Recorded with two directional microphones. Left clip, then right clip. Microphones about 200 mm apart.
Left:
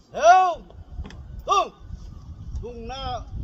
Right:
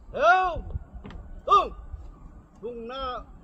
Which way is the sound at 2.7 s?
30° left (ahead or behind).